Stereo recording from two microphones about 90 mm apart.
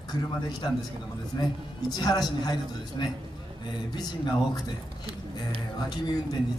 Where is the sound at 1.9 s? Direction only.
50° left (ahead or behind).